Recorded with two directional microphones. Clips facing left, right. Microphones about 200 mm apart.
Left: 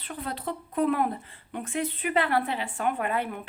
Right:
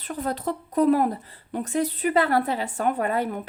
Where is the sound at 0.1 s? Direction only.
45° right (ahead or behind).